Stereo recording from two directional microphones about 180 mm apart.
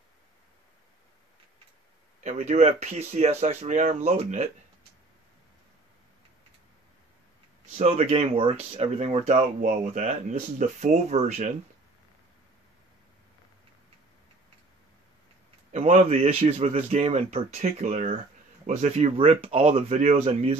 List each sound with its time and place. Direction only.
2.2 s speech: 40° right (ahead or behind)
7.7 s speech: 35° right (ahead or behind)
15.7 s speech: 40° right (ahead or behind)